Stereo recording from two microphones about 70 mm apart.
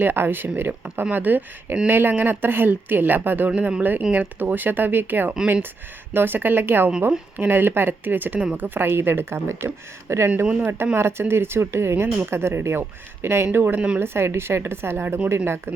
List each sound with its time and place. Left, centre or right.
0.0 s speech: right
3.5 s speech: centre; by 15.7 s right